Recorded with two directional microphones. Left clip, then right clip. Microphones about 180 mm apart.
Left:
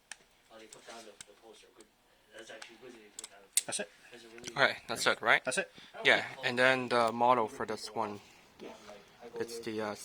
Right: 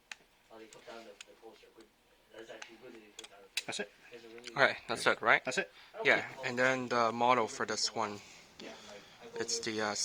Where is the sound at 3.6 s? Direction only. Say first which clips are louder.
Left 1 dB; centre (ahead or behind).